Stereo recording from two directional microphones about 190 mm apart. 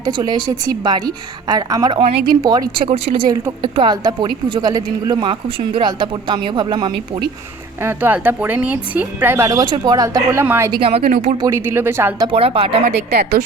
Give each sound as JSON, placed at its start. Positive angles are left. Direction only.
{"t": 0.0, "sound": "speech", "side_deg": -20}
{"t": 2.1, "sound": "speech", "side_deg": -50}
{"t": 2.4, "sound": "speech", "side_deg": -20}
{"t": 7.8, "sound": "speech", "side_deg": -10}
{"t": 10.7, "sound": "speech", "side_deg": -30}
{"t": 11.3, "sound": "speech", "side_deg": -15}
{"t": 12.3, "sound": "speech", "side_deg": -30}
{"t": 12.9, "sound": "speech", "side_deg": -60}